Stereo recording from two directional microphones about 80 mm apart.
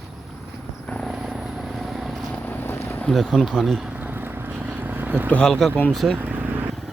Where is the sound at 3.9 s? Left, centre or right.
Right.